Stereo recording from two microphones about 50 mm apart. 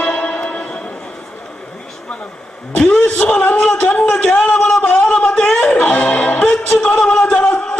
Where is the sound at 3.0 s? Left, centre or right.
Left.